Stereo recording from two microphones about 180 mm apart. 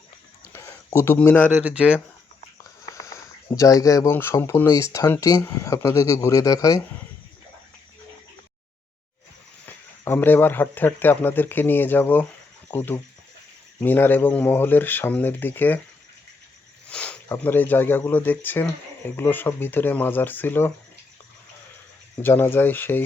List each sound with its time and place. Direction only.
0.4 s a sound: 15° left (ahead or behind)
1.6 s speech: 5° right (ahead or behind)
2.9 s speech: 20° left (ahead or behind)
9.6 s speech: 10° left (ahead or behind)
16.9 s snake: 5° left (ahead or behind)
17.2 s speech: 10° left (ahead or behind)
22.2 s speech: 10° left (ahead or behind)